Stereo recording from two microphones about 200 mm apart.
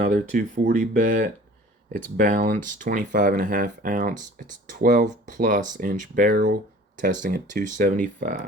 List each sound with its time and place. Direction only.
0.0 s speech: 40° right (ahead or behind)